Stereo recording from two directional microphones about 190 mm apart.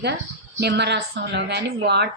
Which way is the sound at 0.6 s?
65° right (ahead or behind).